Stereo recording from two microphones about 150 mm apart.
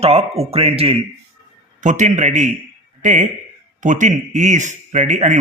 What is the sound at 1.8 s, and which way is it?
Speech, 55° right (ahead or behind).